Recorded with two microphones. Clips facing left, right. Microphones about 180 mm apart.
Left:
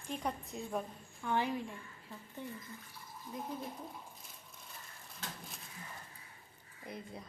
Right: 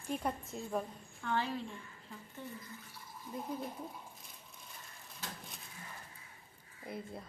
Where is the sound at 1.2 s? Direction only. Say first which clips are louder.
Left 2 dB; 15° left (ahead or behind).